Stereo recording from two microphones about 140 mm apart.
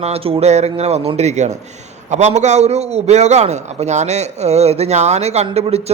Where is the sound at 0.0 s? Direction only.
45° right (ahead or behind).